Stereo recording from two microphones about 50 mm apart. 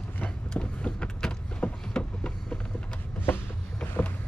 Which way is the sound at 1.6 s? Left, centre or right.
Left.